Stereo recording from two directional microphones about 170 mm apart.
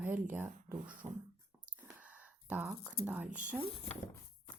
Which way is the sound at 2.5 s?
5° right (ahead or behind).